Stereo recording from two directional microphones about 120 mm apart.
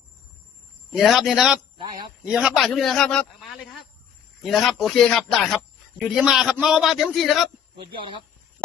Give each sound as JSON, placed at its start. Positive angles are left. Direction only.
{"t": 0.9, "sound": "a man's voice", "side_deg": 0}
{"t": 7.8, "sound": "speech", "side_deg": -40}